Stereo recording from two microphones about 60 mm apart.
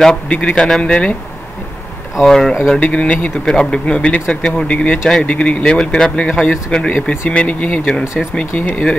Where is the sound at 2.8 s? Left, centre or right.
Centre.